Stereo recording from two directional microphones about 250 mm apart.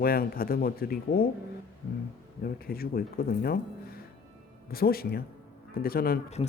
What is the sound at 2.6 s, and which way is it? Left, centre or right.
Speech, left.